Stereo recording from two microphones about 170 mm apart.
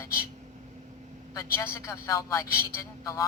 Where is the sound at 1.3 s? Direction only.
20° left (ahead or behind).